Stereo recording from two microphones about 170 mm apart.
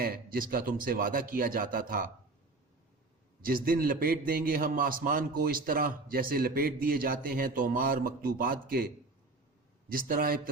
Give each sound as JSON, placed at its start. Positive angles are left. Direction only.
{"t": 0.0, "sound": "a man's voice", "side_deg": -55}
{"t": 3.4, "sound": "a man's voice", "side_deg": -55}
{"t": 9.9, "sound": "a man's voice", "side_deg": -55}